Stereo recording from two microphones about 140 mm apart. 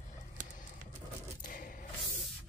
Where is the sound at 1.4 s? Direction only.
85° left.